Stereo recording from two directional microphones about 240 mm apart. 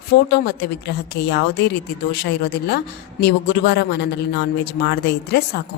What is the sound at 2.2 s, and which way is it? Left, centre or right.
A woman's voice, left.